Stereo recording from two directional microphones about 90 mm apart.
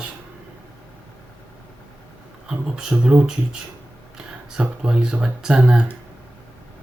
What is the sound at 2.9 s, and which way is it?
Speech, 20° right (ahead or behind).